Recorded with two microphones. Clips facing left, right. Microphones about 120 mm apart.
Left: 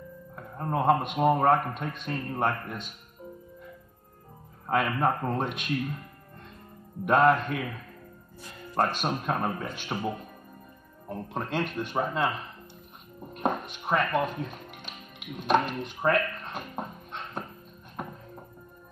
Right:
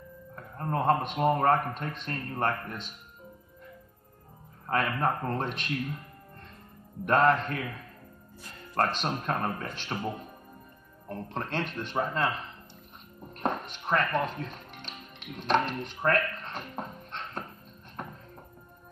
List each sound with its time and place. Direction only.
0.4 s a man's voice: 10° left (ahead or behind)
4.6 s a man's voice: 5° left (ahead or behind)
7.1 s a man's voice: 5° left (ahead or behind)
8.7 s a man's voice: 10° left (ahead or behind)
13.3 s music: 10° left (ahead or behind)